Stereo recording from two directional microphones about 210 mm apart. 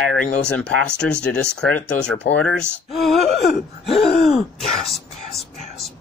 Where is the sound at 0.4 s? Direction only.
5° left (ahead or behind).